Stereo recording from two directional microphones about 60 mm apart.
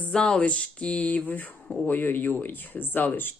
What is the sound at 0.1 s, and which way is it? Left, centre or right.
Speech, centre.